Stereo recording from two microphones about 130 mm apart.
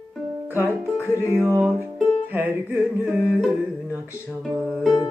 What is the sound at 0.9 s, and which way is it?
Speech, 20° left (ahead or behind).